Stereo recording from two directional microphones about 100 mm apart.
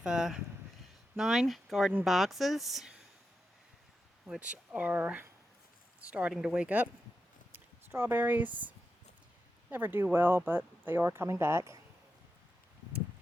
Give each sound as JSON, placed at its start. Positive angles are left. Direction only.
{"t": 0.0, "sound": "speech", "side_deg": -5}
{"t": 4.3, "sound": "speech", "side_deg": -10}
{"t": 7.5, "sound": "a sound", "side_deg": -20}
{"t": 9.6, "sound": "speech", "side_deg": -20}